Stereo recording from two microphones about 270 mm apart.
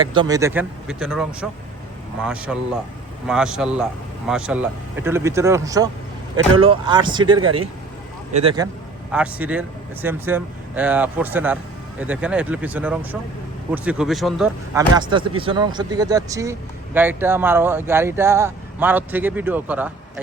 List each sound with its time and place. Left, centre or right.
0.1 s speech: centre
9.1 s speech: centre